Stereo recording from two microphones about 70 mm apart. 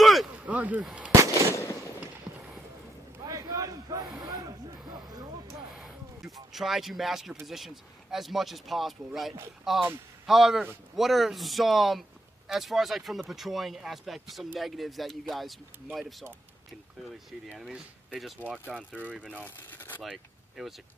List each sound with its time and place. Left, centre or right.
0.0 s a sound: centre
0.5 s speech: right
1.5 s fireworks: left
3.3 s a sound: right
5.8 s a sound: centre
7.4 s speech: centre
18.5 s speech: centre
19.4 s speech: left
20.0 s speech: centre